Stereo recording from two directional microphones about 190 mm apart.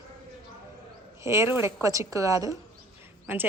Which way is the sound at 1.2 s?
15° right (ahead or behind).